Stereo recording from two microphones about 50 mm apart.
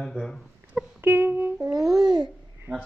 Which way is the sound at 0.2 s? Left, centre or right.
Left.